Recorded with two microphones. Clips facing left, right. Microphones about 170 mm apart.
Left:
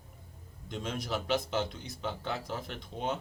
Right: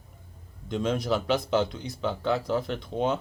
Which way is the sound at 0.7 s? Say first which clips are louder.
Right 9 dB; 90° right.